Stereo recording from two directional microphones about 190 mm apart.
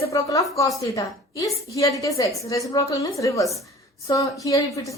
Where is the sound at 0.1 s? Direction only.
15° left (ahead or behind).